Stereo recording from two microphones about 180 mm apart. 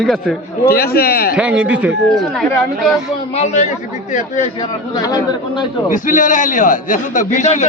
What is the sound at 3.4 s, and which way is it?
Speech, 40° left (ahead or behind).